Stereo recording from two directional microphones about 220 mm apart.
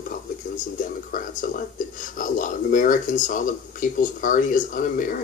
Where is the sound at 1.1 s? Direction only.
40° left (ahead or behind).